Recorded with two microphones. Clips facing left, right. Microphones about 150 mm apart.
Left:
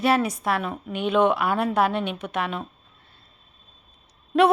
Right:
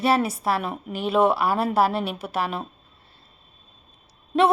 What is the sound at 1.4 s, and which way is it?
Speech, 30° right (ahead or behind).